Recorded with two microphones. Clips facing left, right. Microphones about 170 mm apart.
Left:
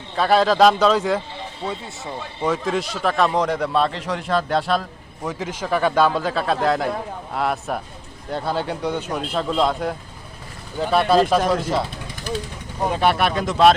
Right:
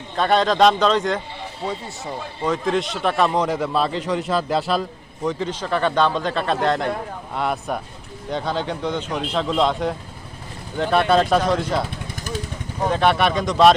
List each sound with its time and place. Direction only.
0.2 s a man's voice: 5° left (ahead or behind)
1.6 s a man's voice: 5° right (ahead or behind)
12.1 s vehicle: 45° right (ahead or behind)
12.8 s a man's voice: 5° left (ahead or behind)